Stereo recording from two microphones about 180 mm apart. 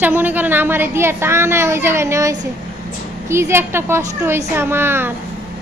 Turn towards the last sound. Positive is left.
turn(degrees=-10)  # may be behind; listen again after turning